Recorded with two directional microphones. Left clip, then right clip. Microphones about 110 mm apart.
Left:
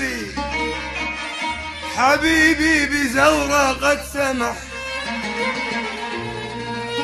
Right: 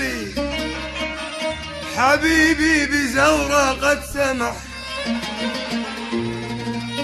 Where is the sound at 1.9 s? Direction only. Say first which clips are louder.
Even; 15° right (ahead or behind).